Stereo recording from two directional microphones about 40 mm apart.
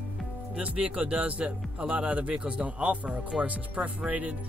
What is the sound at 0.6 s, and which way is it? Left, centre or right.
Speech, right.